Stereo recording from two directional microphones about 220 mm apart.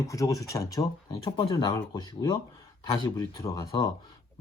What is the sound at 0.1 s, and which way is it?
Speech, 15° left (ahead or behind).